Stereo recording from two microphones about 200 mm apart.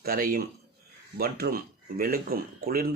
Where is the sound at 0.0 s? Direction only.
45° right (ahead or behind).